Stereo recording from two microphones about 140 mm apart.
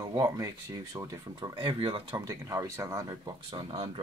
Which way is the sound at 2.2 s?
20° right (ahead or behind).